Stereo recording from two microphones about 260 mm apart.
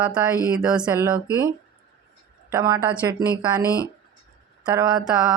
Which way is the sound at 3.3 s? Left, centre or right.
Centre.